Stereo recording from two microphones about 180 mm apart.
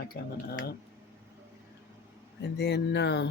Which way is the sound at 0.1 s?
60° left (ahead or behind).